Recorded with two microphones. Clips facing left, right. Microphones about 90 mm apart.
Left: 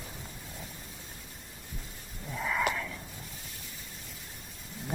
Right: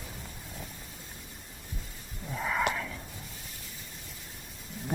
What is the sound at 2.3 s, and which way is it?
Wheeze, 10° right (ahead or behind).